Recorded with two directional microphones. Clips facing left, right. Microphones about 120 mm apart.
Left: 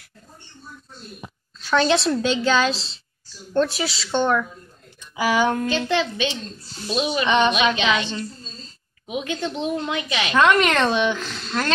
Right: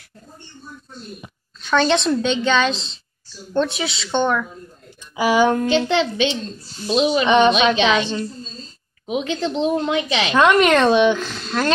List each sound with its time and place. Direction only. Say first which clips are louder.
1.6 s a woman's voice: right 1 dB; 5° left (ahead or behind)
5.1 s speech: right 4 dB; 20° right (ahead or behind)
9.0 s speech: right 4 dB; 25° right (ahead or behind)
10.4 s speech: right 4 dB; 15° right (ahead or behind)